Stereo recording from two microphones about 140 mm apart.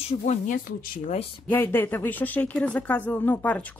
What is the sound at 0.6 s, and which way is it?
Speech, 75° left (ahead or behind).